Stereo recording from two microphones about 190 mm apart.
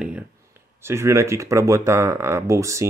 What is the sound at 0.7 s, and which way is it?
Speech, 15° right (ahead or behind).